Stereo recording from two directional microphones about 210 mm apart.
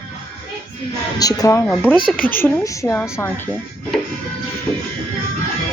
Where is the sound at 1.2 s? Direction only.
15° left (ahead or behind).